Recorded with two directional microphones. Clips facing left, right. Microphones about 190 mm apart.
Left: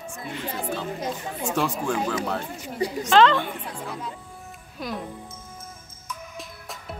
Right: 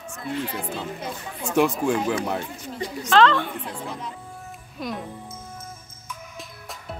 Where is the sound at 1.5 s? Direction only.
15° right (ahead or behind).